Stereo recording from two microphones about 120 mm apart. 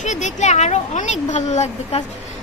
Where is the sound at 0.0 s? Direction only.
85° left.